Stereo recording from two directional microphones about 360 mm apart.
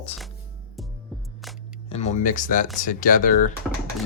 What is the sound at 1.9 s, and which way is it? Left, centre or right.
Speech, centre.